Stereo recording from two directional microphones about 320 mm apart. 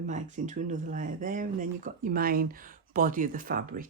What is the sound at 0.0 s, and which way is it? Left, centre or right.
A woman's voice, right.